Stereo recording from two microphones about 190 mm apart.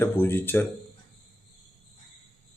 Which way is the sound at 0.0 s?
10° left (ahead or behind).